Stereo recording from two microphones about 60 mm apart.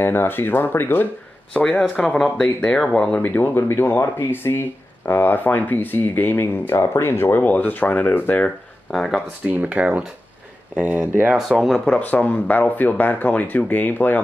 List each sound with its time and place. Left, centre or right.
0.0 s speech: left
1.5 s speech: centre
3.1 s speech: left
7.4 s speech: left
8.9 s speech: centre
9.4 s speech: right
11.3 s speech: centre
12.0 s speech: left